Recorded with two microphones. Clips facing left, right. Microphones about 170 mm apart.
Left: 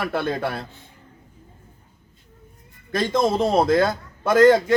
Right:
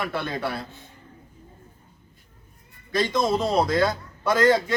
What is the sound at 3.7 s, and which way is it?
Speech, 50° left (ahead or behind).